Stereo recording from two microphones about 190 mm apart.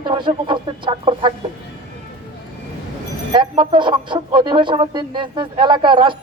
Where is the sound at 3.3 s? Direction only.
25° right (ahead or behind).